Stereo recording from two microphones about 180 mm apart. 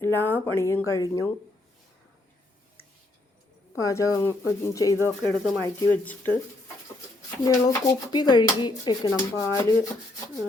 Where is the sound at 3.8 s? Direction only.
20° left (ahead or behind).